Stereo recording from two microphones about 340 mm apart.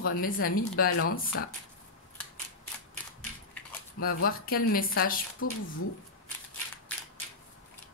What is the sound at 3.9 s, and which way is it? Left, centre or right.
A woman's voice, left.